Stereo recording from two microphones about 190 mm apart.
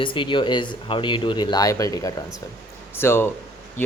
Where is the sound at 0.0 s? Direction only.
25° left (ahead or behind).